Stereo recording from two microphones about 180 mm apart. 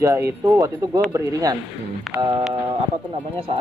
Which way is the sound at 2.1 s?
Centre (ahead or behind).